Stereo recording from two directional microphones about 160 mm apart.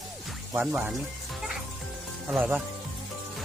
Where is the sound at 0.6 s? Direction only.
5° right (ahead or behind).